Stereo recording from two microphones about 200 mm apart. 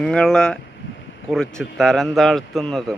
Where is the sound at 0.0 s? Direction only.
5° left (ahead or behind).